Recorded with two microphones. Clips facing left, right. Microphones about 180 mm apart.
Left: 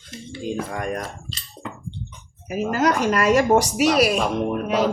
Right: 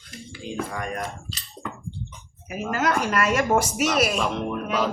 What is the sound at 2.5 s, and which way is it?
Speech, 35° left (ahead or behind).